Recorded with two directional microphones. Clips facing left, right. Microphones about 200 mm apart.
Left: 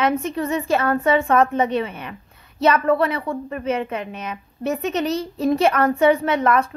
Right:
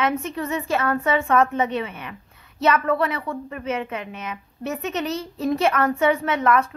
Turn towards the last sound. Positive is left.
turn(degrees=30)  # may be behind; listen again after turning